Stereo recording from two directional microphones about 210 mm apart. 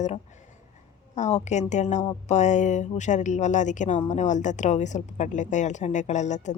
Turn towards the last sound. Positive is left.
turn(degrees=35)  # may be behind; listen again after turning